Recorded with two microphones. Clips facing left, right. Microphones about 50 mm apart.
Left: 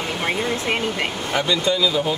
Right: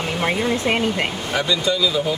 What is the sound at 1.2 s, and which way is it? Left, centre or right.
Speech, left.